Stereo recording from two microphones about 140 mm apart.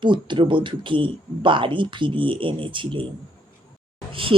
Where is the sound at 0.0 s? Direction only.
35° right (ahead or behind).